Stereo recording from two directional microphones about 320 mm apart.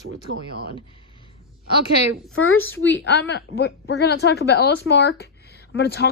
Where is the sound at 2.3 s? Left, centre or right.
Left.